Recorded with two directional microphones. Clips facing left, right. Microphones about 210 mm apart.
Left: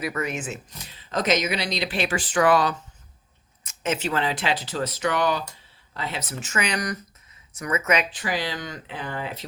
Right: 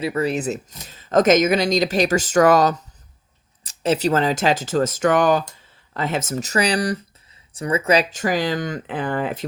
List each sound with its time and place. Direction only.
0.0 s speech: 30° right (ahead or behind); by 9.5 s 50° right (ahead or behind)